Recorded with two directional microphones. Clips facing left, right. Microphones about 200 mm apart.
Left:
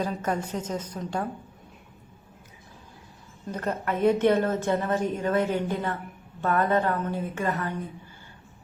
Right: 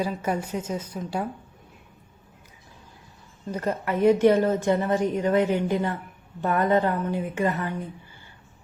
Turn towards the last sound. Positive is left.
turn(degrees=-15)  # may be behind; listen again after turning